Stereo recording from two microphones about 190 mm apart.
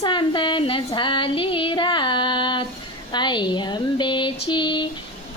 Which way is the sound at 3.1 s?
25° left (ahead or behind).